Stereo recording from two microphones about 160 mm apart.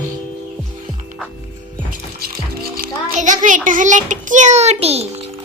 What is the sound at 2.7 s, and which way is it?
A child's voice, 60° right (ahead or behind).